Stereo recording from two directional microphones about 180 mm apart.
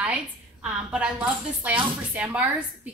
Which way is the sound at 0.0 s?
5° right (ahead or behind).